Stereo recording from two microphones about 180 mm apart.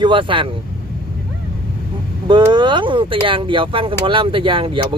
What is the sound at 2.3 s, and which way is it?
Speech, 25° right (ahead or behind).